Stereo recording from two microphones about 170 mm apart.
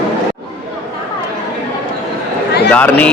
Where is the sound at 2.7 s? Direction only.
10° left (ahead or behind).